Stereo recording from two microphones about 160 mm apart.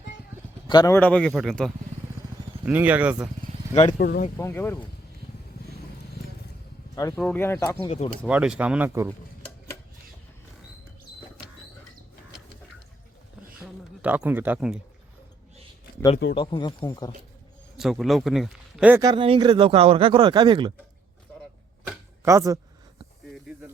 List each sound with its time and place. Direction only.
0.7 s speech: 25° left (ahead or behind)
0.9 s speech: 5° left (ahead or behind)
2.6 s speech: 10° right (ahead or behind)
3.9 s speech: 85° left
4.4 s speech: 15° left (ahead or behind)
7.2 s speech: 10° left (ahead or behind)
7.8 s speech: 35° left (ahead or behind)
8.3 s speech: 5° right (ahead or behind)
13.6 s a sound: 10° right (ahead or behind)
16.3 s speech: 30° left (ahead or behind)
17.7 s speech: centre (ahead or behind)
19.0 s speech: 30° right (ahead or behind)
21.8 s chopping: 15° right (ahead or behind)
23.5 s snake: 15° right (ahead or behind)